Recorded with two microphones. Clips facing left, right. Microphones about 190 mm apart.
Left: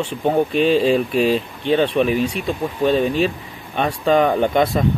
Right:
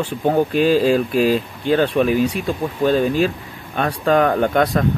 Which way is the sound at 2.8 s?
5° right (ahead or behind).